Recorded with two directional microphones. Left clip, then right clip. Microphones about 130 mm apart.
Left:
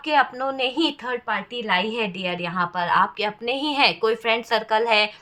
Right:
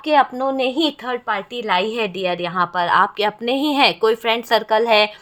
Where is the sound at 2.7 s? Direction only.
90° right.